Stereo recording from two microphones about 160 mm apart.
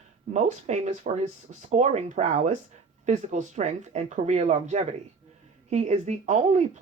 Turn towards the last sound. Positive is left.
turn(degrees=-45)  # may be behind; listen again after turning